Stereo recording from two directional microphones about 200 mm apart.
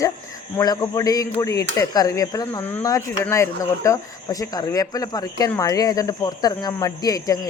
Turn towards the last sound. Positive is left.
turn(degrees=20)  # may be behind; listen again after turning